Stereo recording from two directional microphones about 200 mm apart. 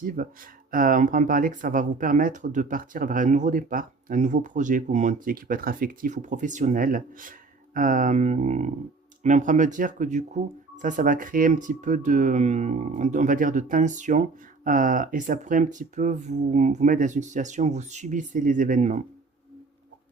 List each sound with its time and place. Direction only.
0.0 s speech: 45° right (ahead or behind)